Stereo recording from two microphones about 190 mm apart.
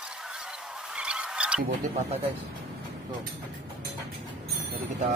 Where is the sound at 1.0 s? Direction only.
5° right (ahead or behind).